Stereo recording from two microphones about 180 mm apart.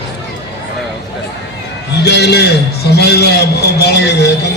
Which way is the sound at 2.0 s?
65° left (ahead or behind).